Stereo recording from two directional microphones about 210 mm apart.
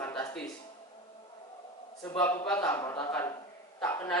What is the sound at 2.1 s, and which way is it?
Speech, 10° left (ahead or behind).